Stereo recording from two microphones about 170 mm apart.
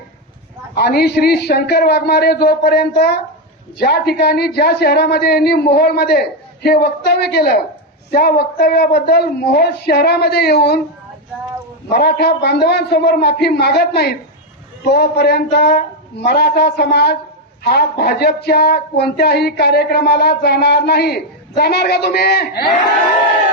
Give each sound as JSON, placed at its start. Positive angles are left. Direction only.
{"t": 0.8, "sound": "a man's voice", "side_deg": 70}
{"t": 11.9, "sound": "a man's voice", "side_deg": 70}